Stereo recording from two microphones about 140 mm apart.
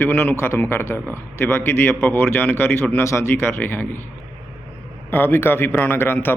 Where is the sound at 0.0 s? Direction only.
15° left (ahead or behind).